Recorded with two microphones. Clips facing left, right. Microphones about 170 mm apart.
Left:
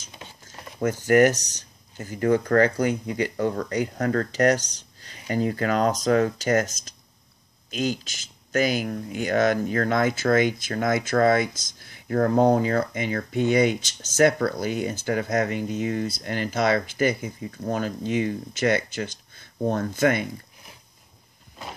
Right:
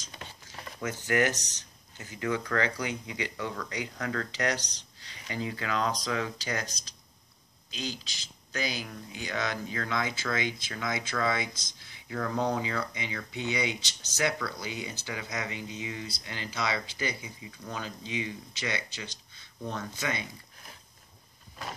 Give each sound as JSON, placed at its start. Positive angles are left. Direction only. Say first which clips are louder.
{"t": 1.0, "sound": "speech", "louder": "left 10 dB", "side_deg": 45}